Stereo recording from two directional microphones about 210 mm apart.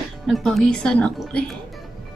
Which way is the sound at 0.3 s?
Centre (ahead or behind).